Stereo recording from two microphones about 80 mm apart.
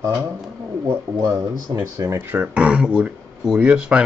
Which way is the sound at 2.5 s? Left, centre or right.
Centre.